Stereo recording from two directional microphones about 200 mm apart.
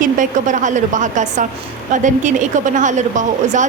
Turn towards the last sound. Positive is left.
turn(degrees=-40)  # may be behind; listen again after turning